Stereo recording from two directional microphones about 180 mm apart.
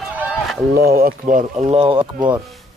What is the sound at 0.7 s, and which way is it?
Speech, 60° right (ahead or behind).